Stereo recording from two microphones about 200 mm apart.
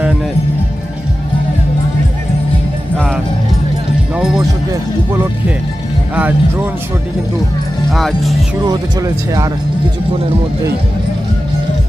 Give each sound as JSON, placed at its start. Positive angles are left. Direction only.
{"t": 4.1, "sound": "music", "side_deg": -5}
{"t": 6.1, "sound": "speech", "side_deg": -10}
{"t": 7.9, "sound": "speech", "side_deg": 0}
{"t": 8.7, "sound": "speech", "side_deg": -15}